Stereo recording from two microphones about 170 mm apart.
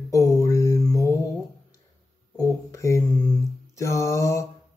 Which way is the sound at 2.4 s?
20° left (ahead or behind).